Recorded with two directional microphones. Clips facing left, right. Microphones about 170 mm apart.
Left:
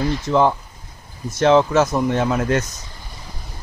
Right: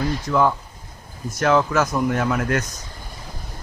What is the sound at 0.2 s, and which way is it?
Speech, 25° left (ahead or behind).